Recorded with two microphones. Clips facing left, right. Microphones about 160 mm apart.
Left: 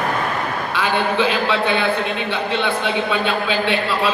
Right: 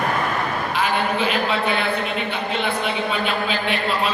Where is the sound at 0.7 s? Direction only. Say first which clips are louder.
Left 3 dB; 90° left.